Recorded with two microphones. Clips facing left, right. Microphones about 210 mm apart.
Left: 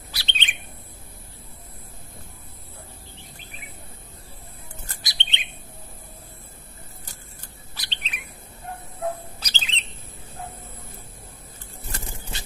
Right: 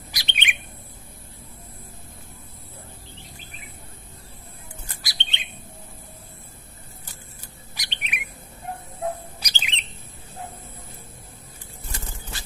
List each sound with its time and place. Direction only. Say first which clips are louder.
0.1 s bird: right 2 dB; 15° right (ahead or behind)
5.0 s bird: left 2 dB; 20° left (ahead or behind)
7.7 s bird: right 3 dB; 15° right (ahead or behind)
9.4 s bird: even; 15° right (ahead or behind)
12.1 s a sound: left 1 dB; 20° left (ahead or behind)